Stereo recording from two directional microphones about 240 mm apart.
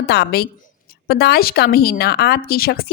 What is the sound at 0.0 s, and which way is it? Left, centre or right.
A woman's voice, left.